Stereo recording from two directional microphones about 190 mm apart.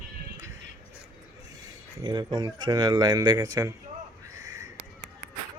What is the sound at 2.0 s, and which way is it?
Speech, 25° right (ahead or behind).